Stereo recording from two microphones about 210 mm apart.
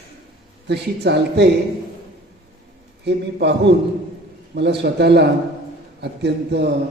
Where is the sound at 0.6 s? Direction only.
55° right (ahead or behind).